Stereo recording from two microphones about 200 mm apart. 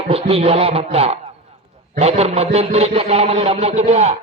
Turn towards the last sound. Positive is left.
turn(degrees=-35)  # may be behind; listen again after turning